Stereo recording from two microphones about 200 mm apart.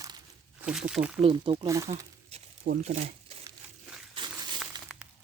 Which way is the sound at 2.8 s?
30° right (ahead or behind).